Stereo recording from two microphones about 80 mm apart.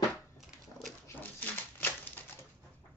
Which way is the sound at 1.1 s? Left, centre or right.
Left.